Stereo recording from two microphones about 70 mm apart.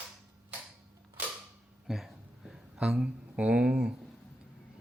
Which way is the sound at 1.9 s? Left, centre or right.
Centre.